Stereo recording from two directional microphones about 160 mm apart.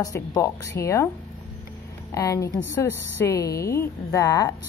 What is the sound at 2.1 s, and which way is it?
A woman's voice, 20° left (ahead or behind).